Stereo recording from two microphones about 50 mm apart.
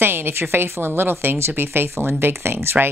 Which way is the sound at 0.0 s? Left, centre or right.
Right.